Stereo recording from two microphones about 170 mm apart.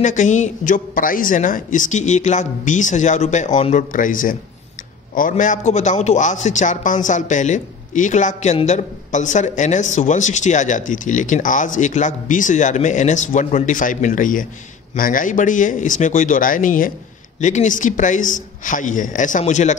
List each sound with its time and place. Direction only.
0.0 s speech: 45° left (ahead or behind)
5.4 s speech: 45° left (ahead or behind)